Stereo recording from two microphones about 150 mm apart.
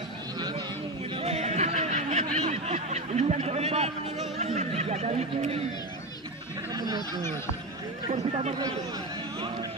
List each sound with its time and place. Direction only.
1.2 s music: 45° right (ahead or behind)
2.5 s a sound: 45° right (ahead or behind)
6.7 s chatter: 25° right (ahead or behind)